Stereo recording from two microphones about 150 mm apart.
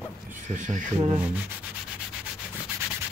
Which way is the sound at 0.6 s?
55° right (ahead or behind).